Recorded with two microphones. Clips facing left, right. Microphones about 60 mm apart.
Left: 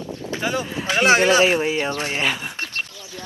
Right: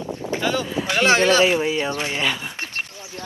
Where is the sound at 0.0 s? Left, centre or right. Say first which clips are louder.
Right 3 dB; right.